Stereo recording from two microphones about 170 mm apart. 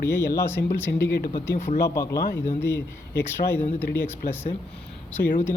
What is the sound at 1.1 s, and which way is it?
Speech, 70° left (ahead or behind).